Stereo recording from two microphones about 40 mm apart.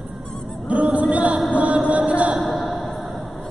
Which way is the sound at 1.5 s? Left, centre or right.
Right.